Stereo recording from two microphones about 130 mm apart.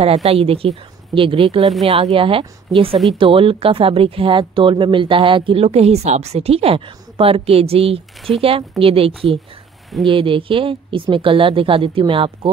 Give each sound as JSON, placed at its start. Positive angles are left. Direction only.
{"t": 0.0, "sound": "speech", "side_deg": -55}
{"t": 1.6, "sound": "speech", "side_deg": 0}
{"t": 1.9, "sound": "speech", "side_deg": -45}